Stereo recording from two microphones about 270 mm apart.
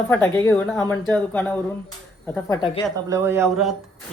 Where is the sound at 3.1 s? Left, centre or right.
Centre.